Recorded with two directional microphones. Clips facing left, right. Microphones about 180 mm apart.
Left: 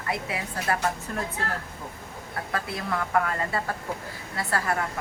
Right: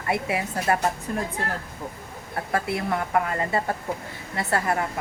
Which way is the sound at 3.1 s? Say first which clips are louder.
Right 1 dB; 25° right (ahead or behind).